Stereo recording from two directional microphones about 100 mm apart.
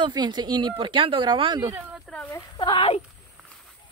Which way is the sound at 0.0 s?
45° right (ahead or behind).